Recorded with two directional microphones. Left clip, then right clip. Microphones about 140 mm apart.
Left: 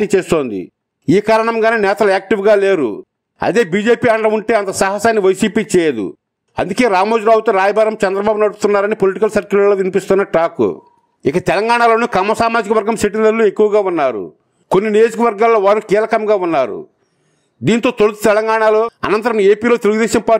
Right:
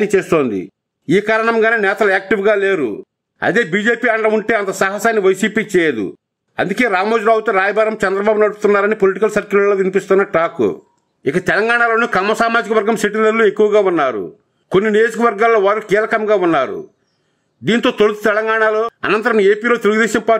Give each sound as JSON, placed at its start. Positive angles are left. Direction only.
{"t": 0.0, "sound": "a man's voice", "side_deg": 30}